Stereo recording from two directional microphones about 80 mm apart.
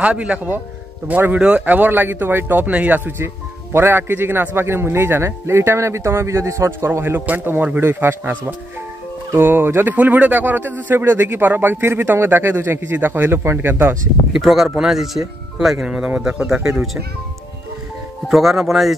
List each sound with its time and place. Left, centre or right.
0.0 s a man's voice: centre
14.3 s speech: centre
18.3 s speech: centre